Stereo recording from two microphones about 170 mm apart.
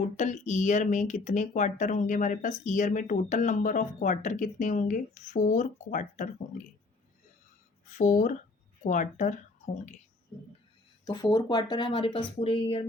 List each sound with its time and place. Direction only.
0.2 s speech: 45° left (ahead or behind)
7.9 s speech: 50° left (ahead or behind)
9.6 s whispering: 45° left (ahead or behind)
11.0 s speech: 20° left (ahead or behind)